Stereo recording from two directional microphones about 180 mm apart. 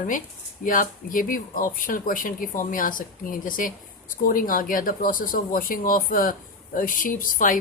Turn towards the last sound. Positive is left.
turn(degrees=50)  # may be behind; listen again after turning